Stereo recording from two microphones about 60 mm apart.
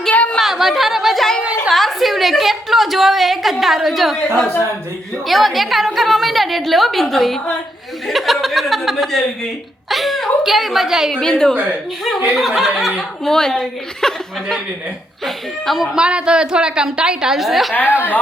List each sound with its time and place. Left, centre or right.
0.1 s a sound: left
0.3 s chatter: centre
1.7 s a sound: centre
5.2 s a woman's voice: centre
11.1 s a woman's voice: centre
11.5 s speech: right
12.3 s a woman's voice: centre
13.2 s a woman's voice: centre
15.2 s a woman's voice: centre
16.0 s a woman's voice: centre